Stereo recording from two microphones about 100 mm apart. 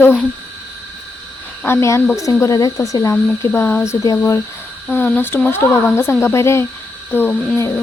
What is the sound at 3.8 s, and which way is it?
Speech, 35° left (ahead or behind).